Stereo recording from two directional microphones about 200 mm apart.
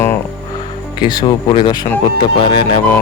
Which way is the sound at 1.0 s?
20° left (ahead or behind).